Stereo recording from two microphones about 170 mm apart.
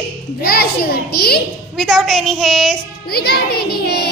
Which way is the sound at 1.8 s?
Centre (ahead or behind).